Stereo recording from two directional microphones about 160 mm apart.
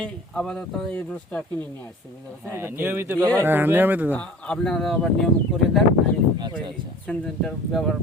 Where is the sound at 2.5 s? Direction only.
15° right (ahead or behind).